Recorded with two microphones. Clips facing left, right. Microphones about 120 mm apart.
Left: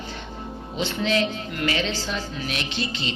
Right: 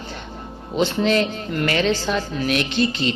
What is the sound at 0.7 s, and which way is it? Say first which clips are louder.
A man's voice: right 5 dB; 50° right (ahead or behind).